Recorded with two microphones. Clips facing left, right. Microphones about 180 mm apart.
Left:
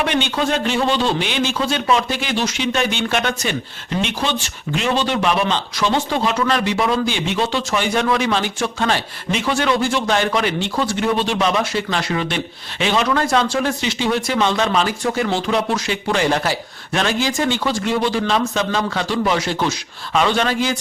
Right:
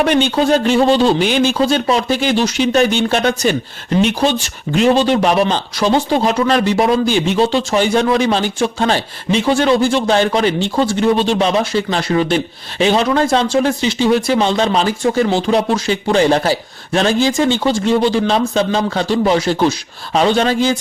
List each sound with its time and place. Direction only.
0.0 s speech: 35° right (ahead or behind)